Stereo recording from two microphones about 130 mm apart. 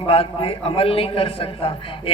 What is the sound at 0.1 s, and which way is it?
A man's voice, 45° left (ahead or behind).